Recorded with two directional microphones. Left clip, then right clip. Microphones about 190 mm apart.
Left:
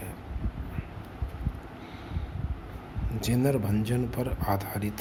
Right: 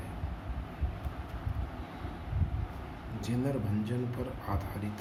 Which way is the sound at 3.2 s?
55° left (ahead or behind).